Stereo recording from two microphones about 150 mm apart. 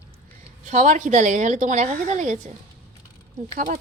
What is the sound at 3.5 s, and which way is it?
Speech, 70° right (ahead or behind).